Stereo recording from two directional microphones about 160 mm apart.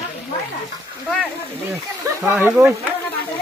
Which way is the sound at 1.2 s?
15° right (ahead or behind).